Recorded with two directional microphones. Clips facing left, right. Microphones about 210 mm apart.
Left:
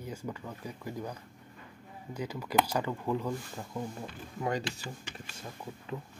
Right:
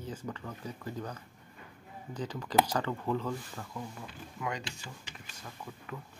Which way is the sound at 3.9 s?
35° left (ahead or behind).